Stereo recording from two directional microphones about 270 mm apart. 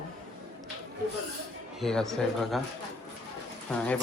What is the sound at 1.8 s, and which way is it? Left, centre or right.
Speech, centre.